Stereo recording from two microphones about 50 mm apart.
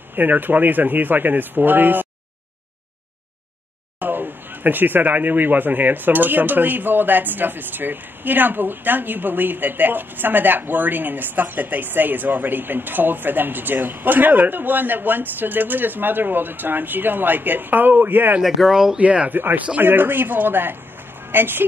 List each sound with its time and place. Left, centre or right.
0.1 s speech: right
4.0 s speech: right
18.4 s speech: centre
18.9 s speech: right
19.8 s speech: right